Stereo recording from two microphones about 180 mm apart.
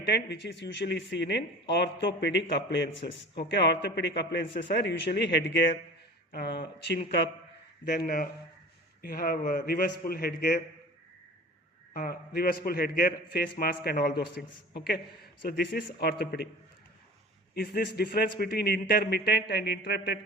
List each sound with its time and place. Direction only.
0.0 s speech: 65° left (ahead or behind)
6.3 s a man's voice: 60° left (ahead or behind)
7.9 s a man's voice: 55° left (ahead or behind)
11.9 s a man's voice: 55° left (ahead or behind)
17.5 s a man's voice: 55° left (ahead or behind)